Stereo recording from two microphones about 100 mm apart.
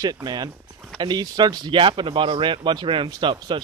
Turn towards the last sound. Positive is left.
turn(degrees=-50)  # may be behind; listen again after turning